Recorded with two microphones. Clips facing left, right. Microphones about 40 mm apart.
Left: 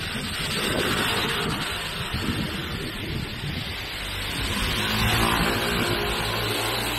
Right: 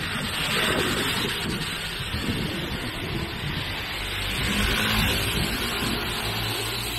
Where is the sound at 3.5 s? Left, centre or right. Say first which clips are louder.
Right 2 dB; right.